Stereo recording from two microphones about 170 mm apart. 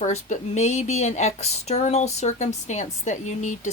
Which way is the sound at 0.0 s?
45° left (ahead or behind).